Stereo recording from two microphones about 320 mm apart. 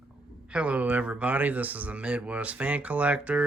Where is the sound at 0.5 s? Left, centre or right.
Centre.